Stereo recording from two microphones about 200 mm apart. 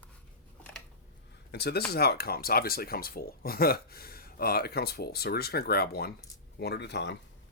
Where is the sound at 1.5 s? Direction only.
55° left (ahead or behind).